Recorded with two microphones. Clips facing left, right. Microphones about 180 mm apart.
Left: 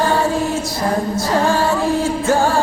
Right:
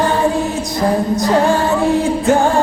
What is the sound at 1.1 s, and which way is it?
Music, 20° right (ahead or behind).